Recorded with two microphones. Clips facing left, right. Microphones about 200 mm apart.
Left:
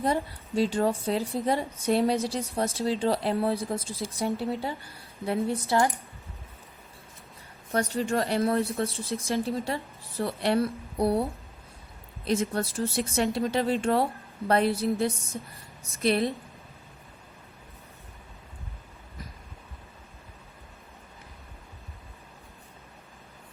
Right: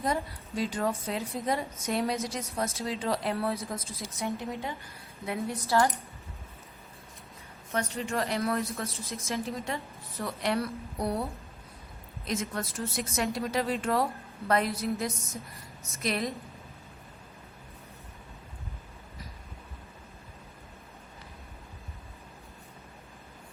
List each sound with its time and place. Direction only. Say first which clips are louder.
0.0 s a woman's voice: left 3 dB; 30° left (ahead or behind)
7.7 s a woman's voice: left 5 dB; 35° left (ahead or behind)